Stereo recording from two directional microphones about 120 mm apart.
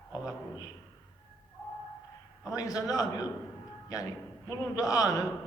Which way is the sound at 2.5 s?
30° left (ahead or behind).